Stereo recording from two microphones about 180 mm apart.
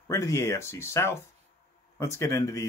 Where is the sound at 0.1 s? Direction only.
15° left (ahead or behind).